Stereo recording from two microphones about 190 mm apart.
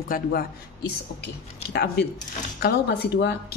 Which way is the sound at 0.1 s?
50° left (ahead or behind).